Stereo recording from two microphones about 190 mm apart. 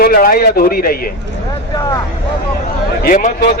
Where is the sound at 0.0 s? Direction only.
50° left (ahead or behind).